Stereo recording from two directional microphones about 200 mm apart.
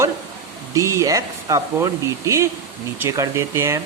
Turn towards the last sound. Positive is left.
turn(degrees=-15)  # may be behind; listen again after turning